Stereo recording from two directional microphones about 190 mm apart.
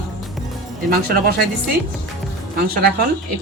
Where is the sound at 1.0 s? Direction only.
50° right (ahead or behind).